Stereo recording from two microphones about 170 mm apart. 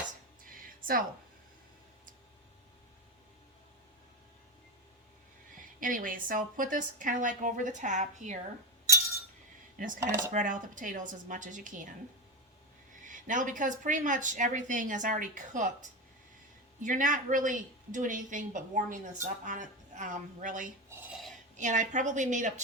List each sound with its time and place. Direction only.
5.8 s a woman's voice: 55° right (ahead or behind)
9.7 s speech: 50° right (ahead or behind)
10.0 s speech: 15° right (ahead or behind)
10.3 s a woman's voice: 50° right (ahead or behind)
13.1 s a woman's voice: 50° right (ahead or behind)
16.8 s a woman's voice: 50° right (ahead or behind)